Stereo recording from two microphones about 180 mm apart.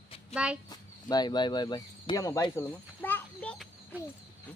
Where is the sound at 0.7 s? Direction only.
20° left (ahead or behind).